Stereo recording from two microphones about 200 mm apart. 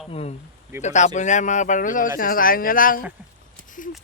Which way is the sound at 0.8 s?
35° left (ahead or behind).